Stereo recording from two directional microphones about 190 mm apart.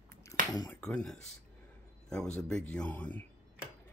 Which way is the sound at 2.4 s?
5° left (ahead or behind).